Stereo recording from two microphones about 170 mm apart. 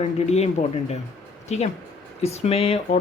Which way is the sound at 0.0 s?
40° left (ahead or behind).